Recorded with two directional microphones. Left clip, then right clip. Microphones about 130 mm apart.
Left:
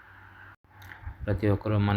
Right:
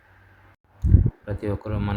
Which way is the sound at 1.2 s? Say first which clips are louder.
Left 5 dB; 10° left (ahead or behind).